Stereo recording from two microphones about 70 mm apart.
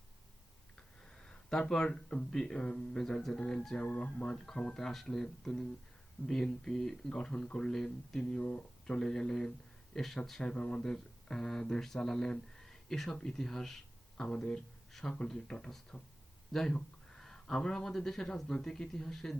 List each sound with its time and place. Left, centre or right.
1.1 s speech: centre
8.2 s speech: centre
9.0 s speech: centre